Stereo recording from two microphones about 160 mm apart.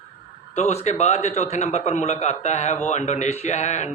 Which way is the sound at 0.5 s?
45° left (ahead or behind).